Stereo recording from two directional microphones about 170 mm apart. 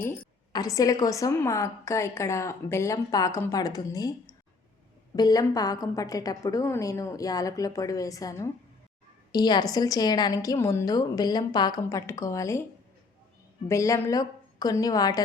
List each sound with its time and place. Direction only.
0.5 s a woman's voice: 20° left (ahead or behind)
13.7 s a woman's voice: 15° left (ahead or behind)